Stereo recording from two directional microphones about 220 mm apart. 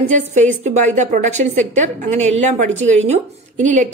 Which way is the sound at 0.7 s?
30° right (ahead or behind).